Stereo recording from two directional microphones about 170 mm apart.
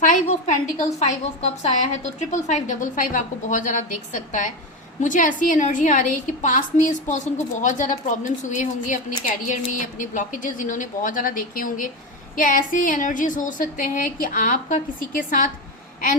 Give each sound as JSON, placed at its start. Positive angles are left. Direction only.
{"t": 0.0, "sound": "a woman's voice", "side_deg": 45}